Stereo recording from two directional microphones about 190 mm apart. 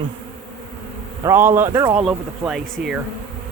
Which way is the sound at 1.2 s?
10° right (ahead or behind).